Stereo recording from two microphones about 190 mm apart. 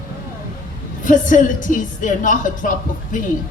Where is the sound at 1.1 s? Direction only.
45° left (ahead or behind).